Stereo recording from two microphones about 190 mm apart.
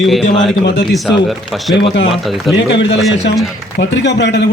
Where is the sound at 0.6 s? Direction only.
65° left (ahead or behind).